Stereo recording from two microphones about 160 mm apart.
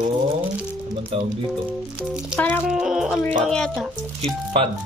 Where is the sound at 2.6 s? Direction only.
5° right (ahead or behind).